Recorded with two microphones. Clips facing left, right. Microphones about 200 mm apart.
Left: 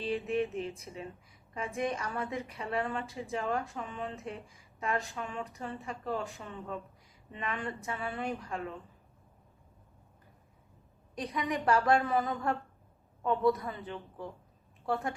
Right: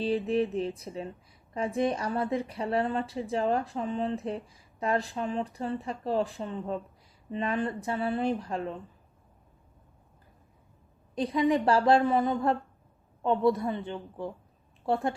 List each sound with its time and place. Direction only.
0.0 s a woman's voice: 35° right (ahead or behind)
11.1 s a woman's voice: 30° right (ahead or behind)